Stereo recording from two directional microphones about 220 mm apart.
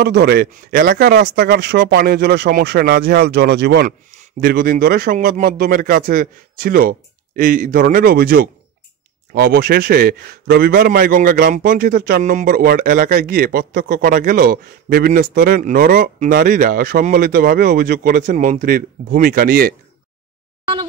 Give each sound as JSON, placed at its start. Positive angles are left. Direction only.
{"t": 0.0, "sound": "a man's voice", "side_deg": -50}